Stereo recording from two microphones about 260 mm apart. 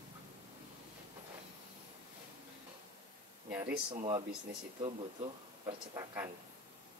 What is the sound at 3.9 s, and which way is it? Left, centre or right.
Speech, centre.